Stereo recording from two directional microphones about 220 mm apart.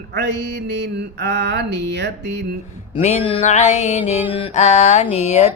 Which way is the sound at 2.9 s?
25° left (ahead or behind).